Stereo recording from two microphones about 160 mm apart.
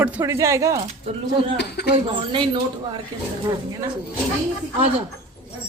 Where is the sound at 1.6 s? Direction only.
90° left.